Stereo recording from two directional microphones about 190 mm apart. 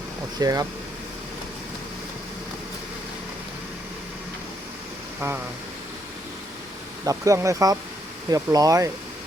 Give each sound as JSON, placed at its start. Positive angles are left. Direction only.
{"t": 0.3, "sound": "speech", "side_deg": -20}
{"t": 7.0, "sound": "speech", "side_deg": -15}